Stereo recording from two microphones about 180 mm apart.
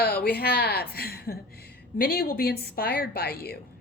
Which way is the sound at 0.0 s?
60° left (ahead or behind).